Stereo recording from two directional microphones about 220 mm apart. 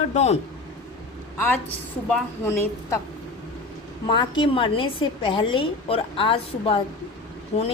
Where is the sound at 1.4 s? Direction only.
10° left (ahead or behind).